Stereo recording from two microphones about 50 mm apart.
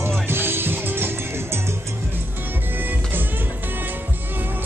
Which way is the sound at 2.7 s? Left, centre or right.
Right.